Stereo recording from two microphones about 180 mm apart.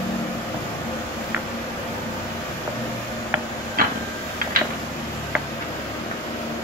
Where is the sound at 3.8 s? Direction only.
50° right (ahead or behind).